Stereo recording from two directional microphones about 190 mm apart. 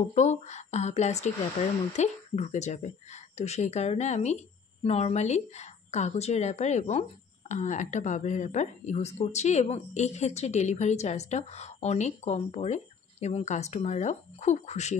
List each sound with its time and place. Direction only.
0.1 s a woman's voice: 35° left (ahead or behind)